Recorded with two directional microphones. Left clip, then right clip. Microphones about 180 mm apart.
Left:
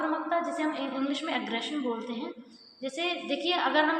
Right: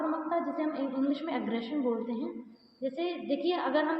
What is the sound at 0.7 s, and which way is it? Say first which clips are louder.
Speech: left 1 dB; 45° right (ahead or behind).